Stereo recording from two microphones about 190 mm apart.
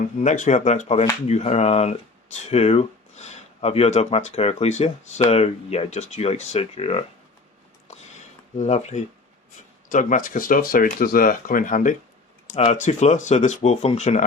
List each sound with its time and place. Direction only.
0.0 s speech: 40° left (ahead or behind)
7.9 s a sound: 35° left (ahead or behind)
8.5 s speech: 35° left (ahead or behind)